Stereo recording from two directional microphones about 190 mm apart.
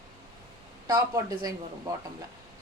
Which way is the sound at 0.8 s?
20° right (ahead or behind).